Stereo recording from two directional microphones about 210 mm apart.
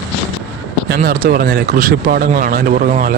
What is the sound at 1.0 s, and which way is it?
Speech, 40° right (ahead or behind).